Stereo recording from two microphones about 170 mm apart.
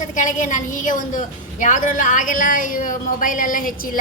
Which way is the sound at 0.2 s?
50° left (ahead or behind).